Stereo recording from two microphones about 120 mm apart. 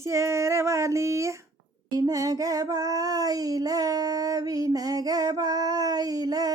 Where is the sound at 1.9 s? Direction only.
30° right (ahead or behind).